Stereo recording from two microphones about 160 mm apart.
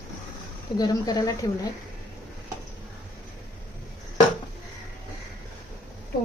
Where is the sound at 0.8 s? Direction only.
25° left (ahead or behind).